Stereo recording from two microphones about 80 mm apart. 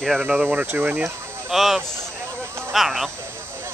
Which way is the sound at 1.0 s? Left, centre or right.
Centre.